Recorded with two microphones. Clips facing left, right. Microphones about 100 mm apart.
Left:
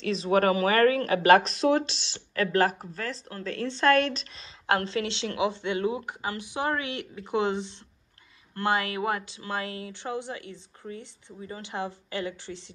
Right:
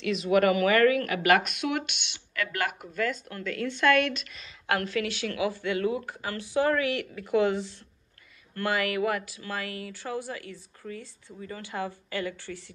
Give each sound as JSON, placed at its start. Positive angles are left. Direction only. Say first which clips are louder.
{"t": 0.0, "sound": "speech", "louder": "even", "side_deg": 35}